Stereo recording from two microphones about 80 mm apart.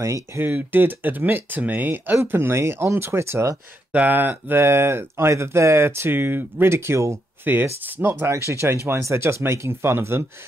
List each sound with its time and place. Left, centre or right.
0.0 s speech: right
0.4 s speech: right
3.9 s speech: right